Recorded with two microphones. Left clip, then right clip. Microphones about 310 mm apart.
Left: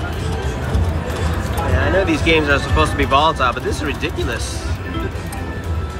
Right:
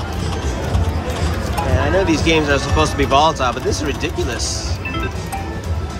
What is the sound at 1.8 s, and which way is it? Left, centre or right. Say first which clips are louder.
Speech: even; centre.